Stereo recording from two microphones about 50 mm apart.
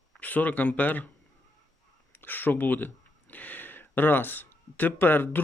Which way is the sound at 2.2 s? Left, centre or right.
Left.